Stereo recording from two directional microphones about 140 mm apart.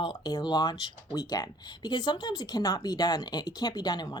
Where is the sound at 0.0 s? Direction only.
30° left (ahead or behind).